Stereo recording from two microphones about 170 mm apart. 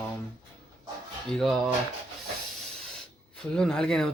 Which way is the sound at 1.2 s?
Centre (ahead or behind).